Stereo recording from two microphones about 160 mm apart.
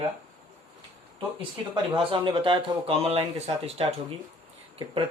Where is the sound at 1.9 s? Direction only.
30° right (ahead or behind).